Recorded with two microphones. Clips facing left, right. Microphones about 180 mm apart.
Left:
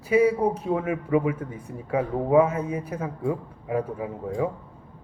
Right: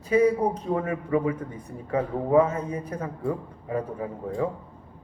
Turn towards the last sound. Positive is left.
turn(degrees=5)  # may be behind; listen again after turning